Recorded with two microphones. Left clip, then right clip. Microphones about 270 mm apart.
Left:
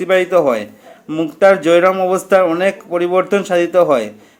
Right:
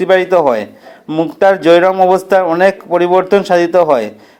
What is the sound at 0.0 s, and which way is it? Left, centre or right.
A man's voice, centre.